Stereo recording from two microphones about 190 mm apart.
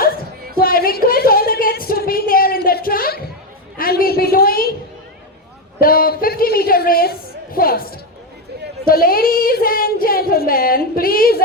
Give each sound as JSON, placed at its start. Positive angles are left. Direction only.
{"t": 0.6, "sound": "a sound", "side_deg": 50}
{"t": 3.8, "sound": "speech", "side_deg": 50}
{"t": 5.8, "sound": "speech", "side_deg": 50}